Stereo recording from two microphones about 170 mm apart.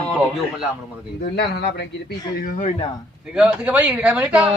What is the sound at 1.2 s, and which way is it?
A man's voice, 80° left.